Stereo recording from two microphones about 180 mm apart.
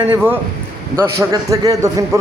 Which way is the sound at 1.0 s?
15° right (ahead or behind).